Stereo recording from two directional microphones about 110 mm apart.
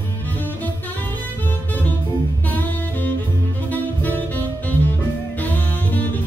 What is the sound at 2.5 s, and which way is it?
Saxophone, 15° left (ahead or behind).